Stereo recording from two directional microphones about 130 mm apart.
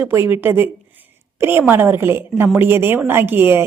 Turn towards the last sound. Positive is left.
turn(degrees=-15)  # may be behind; listen again after turning